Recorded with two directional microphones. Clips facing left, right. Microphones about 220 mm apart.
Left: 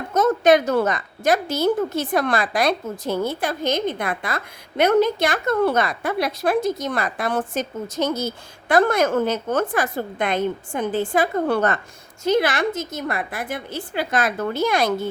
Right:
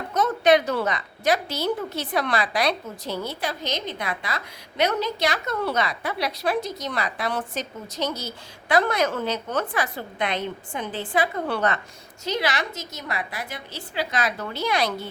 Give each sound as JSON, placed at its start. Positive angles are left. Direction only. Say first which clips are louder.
{"t": 0.1, "sound": "a woman's voice", "louder": "left 3 dB", "side_deg": 45}